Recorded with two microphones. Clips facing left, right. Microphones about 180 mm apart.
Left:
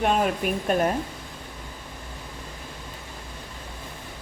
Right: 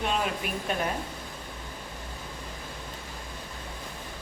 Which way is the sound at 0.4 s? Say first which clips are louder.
Left 7 dB; 45° left (ahead or behind).